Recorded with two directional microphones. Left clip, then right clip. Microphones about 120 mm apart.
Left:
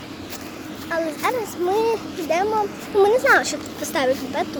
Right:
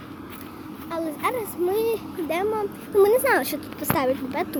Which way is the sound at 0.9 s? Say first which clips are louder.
Left 4 dB; 25° right (ahead or behind).